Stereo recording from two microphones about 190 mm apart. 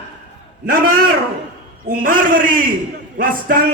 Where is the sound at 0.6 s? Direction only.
50° right (ahead or behind).